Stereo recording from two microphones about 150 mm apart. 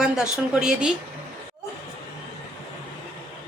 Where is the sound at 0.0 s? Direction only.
5° right (ahead or behind).